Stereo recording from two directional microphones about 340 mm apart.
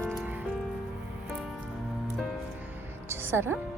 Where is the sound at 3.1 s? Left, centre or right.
Centre.